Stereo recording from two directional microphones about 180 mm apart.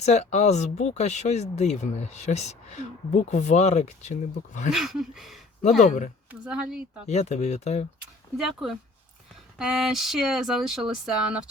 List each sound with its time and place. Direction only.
0.0 s speech: 40° left (ahead or behind)
4.7 s speech: centre (ahead or behind)
5.8 s speech: 40° left (ahead or behind)
6.4 s speech: 5° right (ahead or behind)
7.1 s speech: 40° left (ahead or behind)
8.4 s speech: centre (ahead or behind)